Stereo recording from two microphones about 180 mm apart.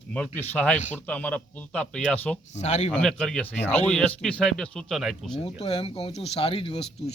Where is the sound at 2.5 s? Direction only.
40° left (ahead or behind).